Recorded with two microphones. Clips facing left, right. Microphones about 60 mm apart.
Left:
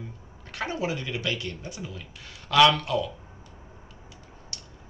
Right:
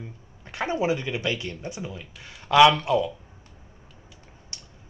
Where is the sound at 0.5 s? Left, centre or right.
Right.